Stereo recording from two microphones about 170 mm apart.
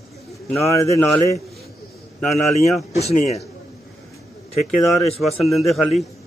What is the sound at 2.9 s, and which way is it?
Speech, 40° left (ahead or behind).